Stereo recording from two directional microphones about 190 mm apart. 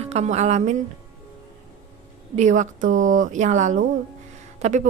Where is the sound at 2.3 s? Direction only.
40° right (ahead or behind).